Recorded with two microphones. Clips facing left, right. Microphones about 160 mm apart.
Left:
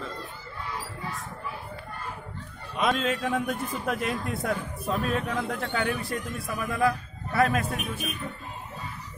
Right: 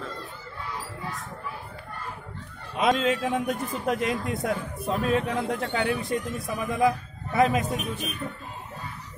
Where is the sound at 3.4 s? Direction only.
25° right (ahead or behind).